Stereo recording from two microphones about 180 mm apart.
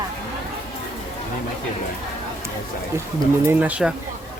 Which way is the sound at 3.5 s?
10° right (ahead or behind).